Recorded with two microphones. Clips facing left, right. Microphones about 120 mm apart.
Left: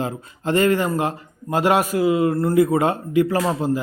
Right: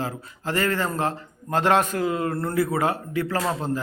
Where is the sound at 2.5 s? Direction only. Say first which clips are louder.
Left 5 dB; 20° left (ahead or behind).